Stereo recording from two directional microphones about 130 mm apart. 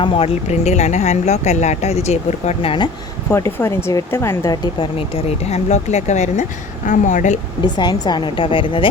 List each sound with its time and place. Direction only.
0.0 s a woman's voice: 40° left (ahead or behind)
0.4 s speech: 60° left (ahead or behind); by 2.9 s 40° left (ahead or behind)
3.2 s speech: 20° left (ahead or behind)
4.9 s speech: 50° left (ahead or behind)
6.8 s speech: 75° left (ahead or behind)
7.6 s a woman's voice: 35° left (ahead or behind)